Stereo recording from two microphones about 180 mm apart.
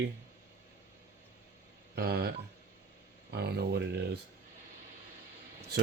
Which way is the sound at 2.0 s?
70° right (ahead or behind).